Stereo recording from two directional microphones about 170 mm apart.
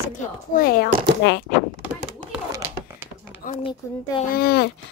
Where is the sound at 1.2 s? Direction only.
90° left.